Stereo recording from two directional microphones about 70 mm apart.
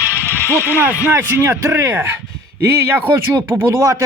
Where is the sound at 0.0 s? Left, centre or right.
Left.